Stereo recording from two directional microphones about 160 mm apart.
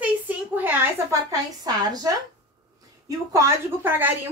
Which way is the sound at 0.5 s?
10° right (ahead or behind).